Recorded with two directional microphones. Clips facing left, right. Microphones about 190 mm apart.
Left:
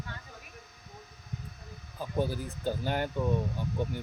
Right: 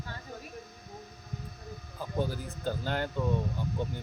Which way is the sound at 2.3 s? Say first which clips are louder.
Left 1 dB; 15° left (ahead or behind).